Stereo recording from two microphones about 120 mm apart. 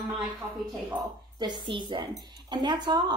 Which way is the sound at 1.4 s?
40° right (ahead or behind).